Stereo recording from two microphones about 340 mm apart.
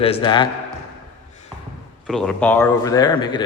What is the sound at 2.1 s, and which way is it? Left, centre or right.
A man's voice, centre.